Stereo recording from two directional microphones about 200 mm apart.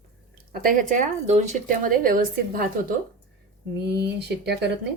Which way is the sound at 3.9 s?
55° right (ahead or behind).